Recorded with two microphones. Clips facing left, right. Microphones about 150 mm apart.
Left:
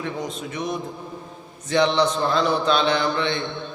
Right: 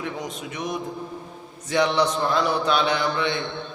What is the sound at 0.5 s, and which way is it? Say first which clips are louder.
A man's voice: even; 15° right (ahead or behind).